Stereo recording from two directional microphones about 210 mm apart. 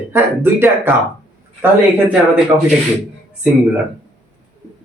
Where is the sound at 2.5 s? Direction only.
25° right (ahead or behind).